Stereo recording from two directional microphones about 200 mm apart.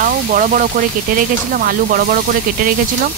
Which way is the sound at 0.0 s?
40° right (ahead or behind).